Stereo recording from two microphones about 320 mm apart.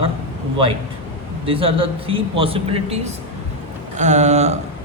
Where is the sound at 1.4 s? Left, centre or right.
Centre.